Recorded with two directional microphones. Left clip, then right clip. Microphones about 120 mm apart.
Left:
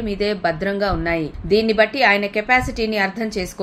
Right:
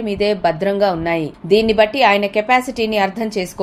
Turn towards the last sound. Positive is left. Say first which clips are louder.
# right 3 dB
turn(degrees=-30)  # may be behind; listen again after turning